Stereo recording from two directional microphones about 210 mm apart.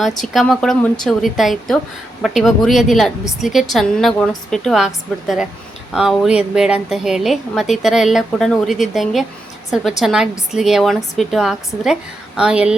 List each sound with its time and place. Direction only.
0.3 s a woman's voice: centre (ahead or behind)
5.9 s a woman's voice: centre (ahead or behind)